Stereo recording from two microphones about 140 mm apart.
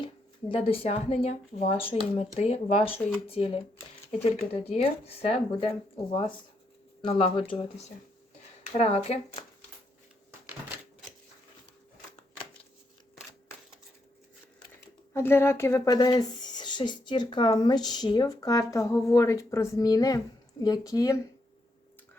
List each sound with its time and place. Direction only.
0.0 s speech: 40° left (ahead or behind)
4.8 s speech: 45° left (ahead or behind)
9.0 s speech: 45° left (ahead or behind)
15.1 s speech: 15° left (ahead or behind)